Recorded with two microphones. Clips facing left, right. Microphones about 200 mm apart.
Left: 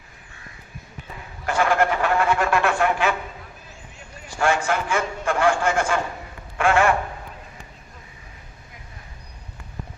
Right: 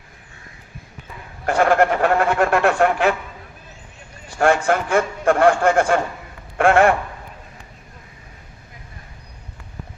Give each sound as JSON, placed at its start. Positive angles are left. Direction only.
{"t": 1.5, "sound": "speech", "side_deg": -55}
{"t": 4.4, "sound": "a man's voice", "side_deg": -55}